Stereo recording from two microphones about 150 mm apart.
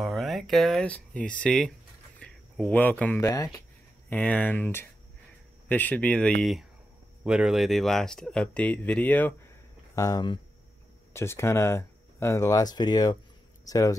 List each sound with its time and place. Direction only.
0.0 s speech: centre (ahead or behind)
2.1 s a sound: 5° left (ahead or behind)
3.2 s speech: 25° left (ahead or behind)
4.1 s speech: 10° left (ahead or behind)
9.9 s speech: 25° left (ahead or behind)
11.1 s speech: 15° left (ahead or behind)